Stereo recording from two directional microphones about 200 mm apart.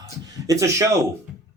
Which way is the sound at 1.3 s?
5° right (ahead or behind).